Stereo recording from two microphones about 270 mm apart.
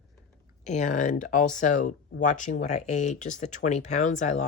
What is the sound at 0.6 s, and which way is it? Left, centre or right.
Speech, left.